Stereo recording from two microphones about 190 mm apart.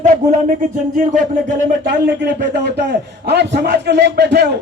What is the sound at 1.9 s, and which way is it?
A man's voice, 60° right (ahead or behind).